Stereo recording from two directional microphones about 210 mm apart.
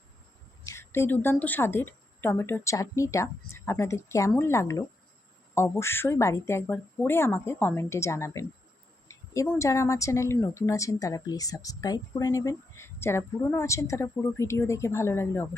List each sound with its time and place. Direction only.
0.6 s a woman's voice: 10° left (ahead or behind)